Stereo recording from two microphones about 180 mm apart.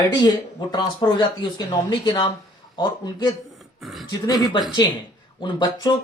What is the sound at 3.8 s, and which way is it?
Speech, centre (ahead or behind).